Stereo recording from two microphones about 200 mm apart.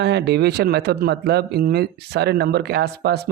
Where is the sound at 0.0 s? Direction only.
60° right (ahead or behind).